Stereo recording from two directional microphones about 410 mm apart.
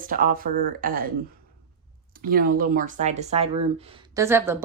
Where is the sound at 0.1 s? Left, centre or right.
Centre.